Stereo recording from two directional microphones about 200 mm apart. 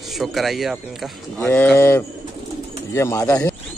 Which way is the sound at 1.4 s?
10° left (ahead or behind).